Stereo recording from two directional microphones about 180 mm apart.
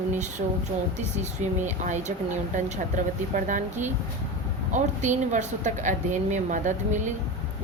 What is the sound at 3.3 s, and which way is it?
Speech, 45° right (ahead or behind).